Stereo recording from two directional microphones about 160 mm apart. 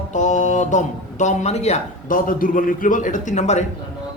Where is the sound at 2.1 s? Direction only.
60° left (ahead or behind).